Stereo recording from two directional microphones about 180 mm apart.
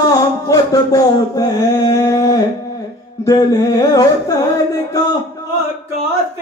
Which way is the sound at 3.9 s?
20° left (ahead or behind).